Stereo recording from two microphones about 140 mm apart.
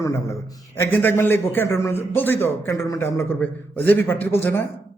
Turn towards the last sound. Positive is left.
turn(degrees=15)  # may be behind; listen again after turning